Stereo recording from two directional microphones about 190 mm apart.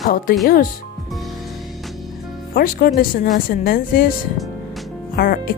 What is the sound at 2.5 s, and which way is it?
Speech, 50° left (ahead or behind).